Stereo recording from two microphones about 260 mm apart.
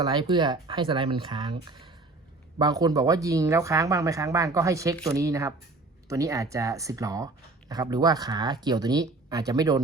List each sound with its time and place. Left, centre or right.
0.0 s speech: centre